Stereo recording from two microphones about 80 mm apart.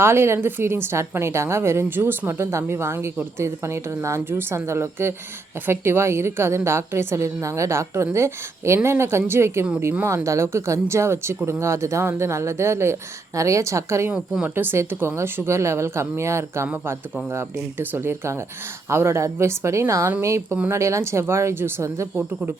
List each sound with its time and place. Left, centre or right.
0.0 s speech: right
14.4 s speech: right